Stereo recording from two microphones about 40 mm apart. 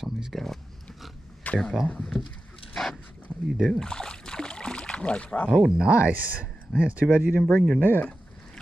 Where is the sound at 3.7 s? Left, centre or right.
Centre.